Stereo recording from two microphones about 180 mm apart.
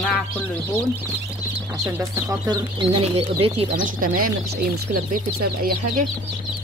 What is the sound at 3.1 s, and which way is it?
Speech, 30° right (ahead or behind).